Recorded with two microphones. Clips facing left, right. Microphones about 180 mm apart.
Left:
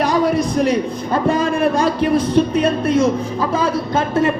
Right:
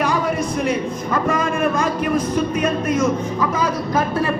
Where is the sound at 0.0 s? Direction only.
35° left (ahead or behind).